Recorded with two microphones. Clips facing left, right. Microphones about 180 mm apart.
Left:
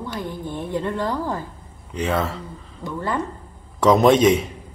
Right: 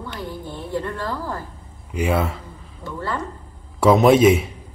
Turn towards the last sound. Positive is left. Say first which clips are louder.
# right 1 dB
turn(degrees=-5)  # may be behind; listen again after turning